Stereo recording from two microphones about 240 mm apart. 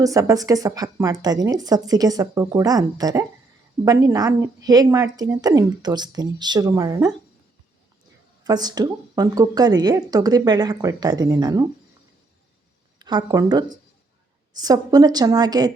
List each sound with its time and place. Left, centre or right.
0.0 s a woman's voice: centre
8.4 s a woman's voice: centre
13.0 s a woman's voice: centre